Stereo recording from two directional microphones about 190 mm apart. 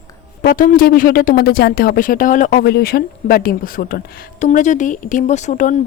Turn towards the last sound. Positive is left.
turn(degrees=40)  # may be behind; listen again after turning